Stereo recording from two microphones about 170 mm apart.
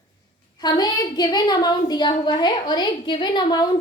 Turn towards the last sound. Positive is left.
turn(degrees=25)  # may be behind; listen again after turning